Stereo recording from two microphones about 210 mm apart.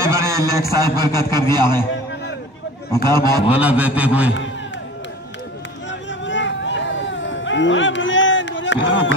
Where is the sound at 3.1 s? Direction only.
20° right (ahead or behind).